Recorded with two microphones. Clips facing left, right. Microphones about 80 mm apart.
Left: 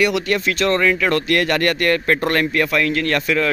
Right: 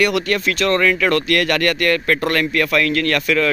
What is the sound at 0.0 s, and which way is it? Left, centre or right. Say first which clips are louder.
Speech: even; centre.